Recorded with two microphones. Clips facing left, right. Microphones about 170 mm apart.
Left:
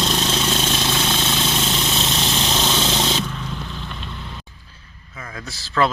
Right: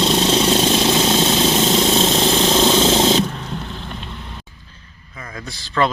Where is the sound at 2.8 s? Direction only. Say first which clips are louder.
Right 7 dB; 30° right (ahead or behind).